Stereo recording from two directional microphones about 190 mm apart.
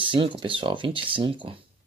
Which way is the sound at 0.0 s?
25° right (ahead or behind).